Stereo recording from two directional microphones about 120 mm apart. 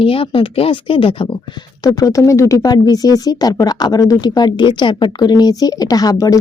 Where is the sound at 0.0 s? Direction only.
50° left (ahead or behind).